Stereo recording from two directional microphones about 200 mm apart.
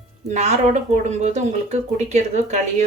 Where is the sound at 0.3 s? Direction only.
35° right (ahead or behind).